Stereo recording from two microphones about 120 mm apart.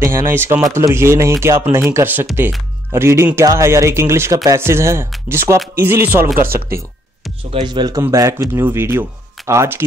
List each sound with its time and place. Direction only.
0.0 s speech: 20° right (ahead or behind)
7.6 s speech: 35° right (ahead or behind)
8.0 s speech: 25° right (ahead or behind)